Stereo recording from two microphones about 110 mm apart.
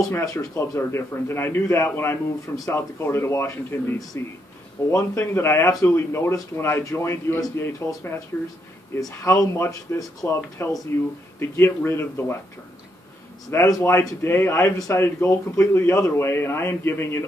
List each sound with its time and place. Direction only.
0.1 s a man's voice: 30° left (ahead or behind)
13.5 s a man's voice: 25° left (ahead or behind)